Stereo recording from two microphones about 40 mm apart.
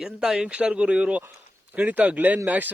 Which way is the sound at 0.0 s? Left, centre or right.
Centre.